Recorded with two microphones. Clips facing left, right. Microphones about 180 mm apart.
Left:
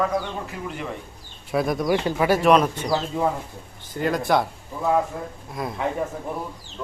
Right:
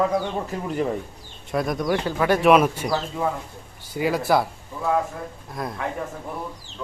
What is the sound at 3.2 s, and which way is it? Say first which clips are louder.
Speech: left 3 dB; 25° left (ahead or behind).